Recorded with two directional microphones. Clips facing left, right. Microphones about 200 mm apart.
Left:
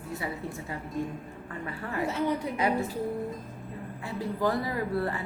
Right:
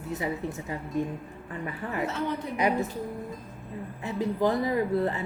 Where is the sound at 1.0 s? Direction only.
20° right (ahead or behind).